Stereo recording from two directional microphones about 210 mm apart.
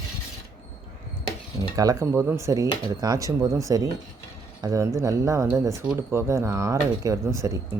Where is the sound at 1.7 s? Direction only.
15° right (ahead or behind).